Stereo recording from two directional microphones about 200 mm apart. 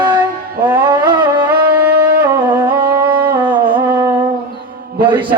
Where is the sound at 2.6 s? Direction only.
20° right (ahead or behind).